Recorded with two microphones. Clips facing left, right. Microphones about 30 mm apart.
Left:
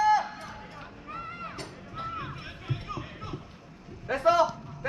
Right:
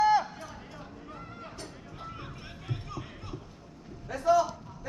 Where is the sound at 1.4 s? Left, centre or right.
Left.